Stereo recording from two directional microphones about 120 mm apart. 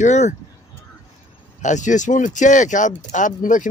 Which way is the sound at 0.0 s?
80° left.